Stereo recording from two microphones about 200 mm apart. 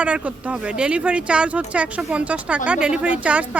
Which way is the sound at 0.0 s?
5° right (ahead or behind).